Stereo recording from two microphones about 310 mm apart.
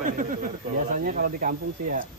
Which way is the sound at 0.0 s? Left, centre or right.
Right.